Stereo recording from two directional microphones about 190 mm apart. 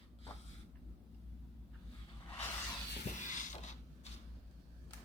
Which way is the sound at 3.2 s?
40° left (ahead or behind).